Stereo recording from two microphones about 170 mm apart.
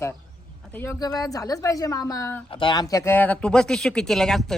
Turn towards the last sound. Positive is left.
turn(degrees=0)  # may be behind; listen again after turning